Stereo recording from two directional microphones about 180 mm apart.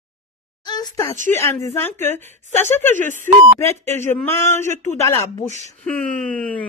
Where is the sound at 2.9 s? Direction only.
45° right (ahead or behind).